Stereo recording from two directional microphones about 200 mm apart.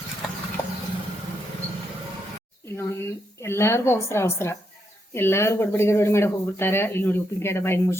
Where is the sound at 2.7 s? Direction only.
10° left (ahead or behind).